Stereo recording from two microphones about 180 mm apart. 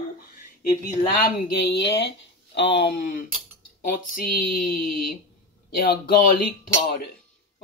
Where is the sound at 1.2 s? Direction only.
60° left (ahead or behind).